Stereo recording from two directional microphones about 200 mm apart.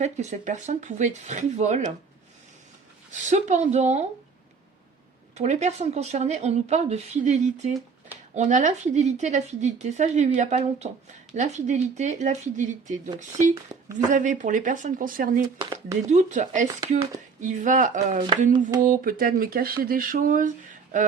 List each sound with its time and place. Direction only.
0.0 s a woman's voice: 35° right (ahead or behind)
3.1 s a woman's voice: 35° right (ahead or behind)
5.4 s a woman's voice: 35° right (ahead or behind)
14.1 s a woman's voice: 40° right (ahead or behind)
15.6 s a sound: 20° right (ahead or behind)
16.0 s a woman's voice: 35° right (ahead or behind)
18.2 s a sound: 25° right (ahead or behind)
18.9 s speech: 45° right (ahead or behind)